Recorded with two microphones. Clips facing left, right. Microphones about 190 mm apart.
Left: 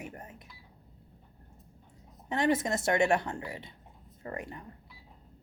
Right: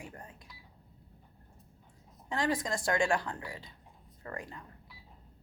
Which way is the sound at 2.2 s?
25° left (ahead or behind).